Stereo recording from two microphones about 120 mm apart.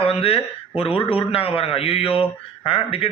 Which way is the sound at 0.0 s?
55° left (ahead or behind).